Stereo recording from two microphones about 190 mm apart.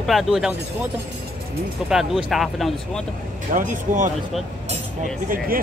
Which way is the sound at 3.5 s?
40° right (ahead or behind).